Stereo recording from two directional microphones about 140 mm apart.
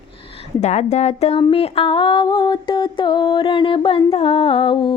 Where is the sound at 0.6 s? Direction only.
55° left (ahead or behind).